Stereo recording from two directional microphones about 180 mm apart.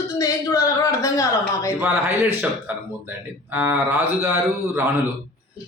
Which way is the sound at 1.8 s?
10° right (ahead or behind).